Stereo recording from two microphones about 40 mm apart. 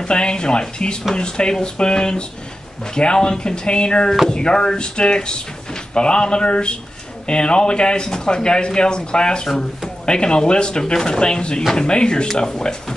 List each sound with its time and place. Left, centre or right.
0.0 s speech: left